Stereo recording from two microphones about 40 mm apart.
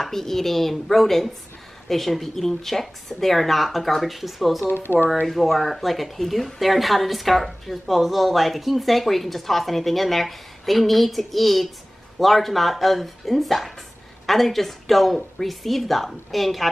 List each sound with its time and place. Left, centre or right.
0.0 s speech: centre
4.6 s speech: left
5.2 s speech: centre